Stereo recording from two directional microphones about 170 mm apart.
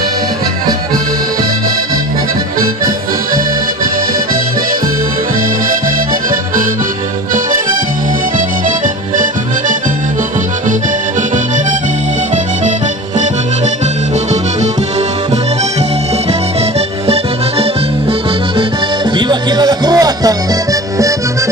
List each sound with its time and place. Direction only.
16.6 s accordion: 40° right (ahead or behind)
19.1 s music: 25° right (ahead or behind)